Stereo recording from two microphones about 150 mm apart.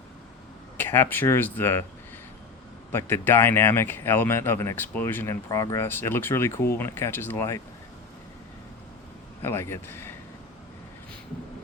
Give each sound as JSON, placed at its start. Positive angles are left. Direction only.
{"t": 0.8, "sound": "speech", "side_deg": 15}
{"t": 2.9, "sound": "speech", "side_deg": 15}
{"t": 9.4, "sound": "speech", "side_deg": 15}